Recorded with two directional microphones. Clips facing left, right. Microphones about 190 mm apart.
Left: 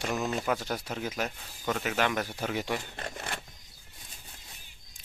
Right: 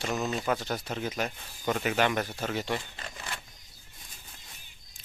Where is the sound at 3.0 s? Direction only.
60° left (ahead or behind).